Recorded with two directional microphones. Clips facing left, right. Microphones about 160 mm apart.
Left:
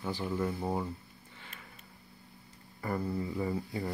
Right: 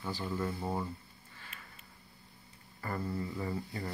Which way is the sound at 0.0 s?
15° left (ahead or behind).